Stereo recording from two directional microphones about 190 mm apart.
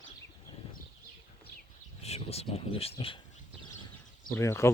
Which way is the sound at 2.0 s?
35° left (ahead or behind).